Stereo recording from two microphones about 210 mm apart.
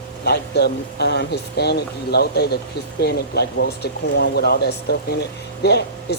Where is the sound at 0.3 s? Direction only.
50° left (ahead or behind).